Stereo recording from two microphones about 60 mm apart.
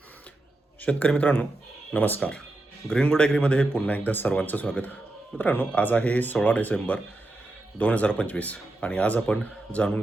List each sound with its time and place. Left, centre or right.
0.8 s speech: left
2.8 s speech: centre